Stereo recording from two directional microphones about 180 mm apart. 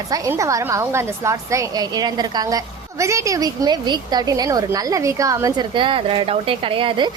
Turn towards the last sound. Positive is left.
turn(degrees=-30)  # may be behind; listen again after turning